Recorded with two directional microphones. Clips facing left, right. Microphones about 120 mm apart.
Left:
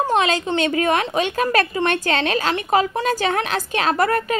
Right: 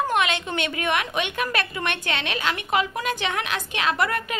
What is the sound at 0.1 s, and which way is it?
A woman's voice, 30° left (ahead or behind).